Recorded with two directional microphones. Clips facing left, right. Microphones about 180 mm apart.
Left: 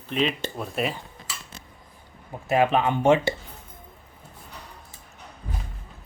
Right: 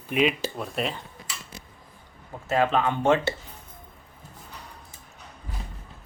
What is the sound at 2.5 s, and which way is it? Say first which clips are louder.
Speech: left 2 dB; 15° left (ahead or behind).